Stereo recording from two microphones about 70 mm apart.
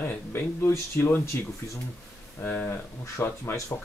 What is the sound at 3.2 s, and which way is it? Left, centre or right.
Speech, left.